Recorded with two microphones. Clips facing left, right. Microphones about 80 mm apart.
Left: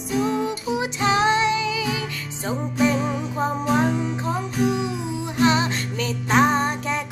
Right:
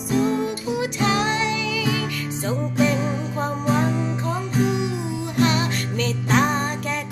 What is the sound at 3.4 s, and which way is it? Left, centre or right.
Music, centre.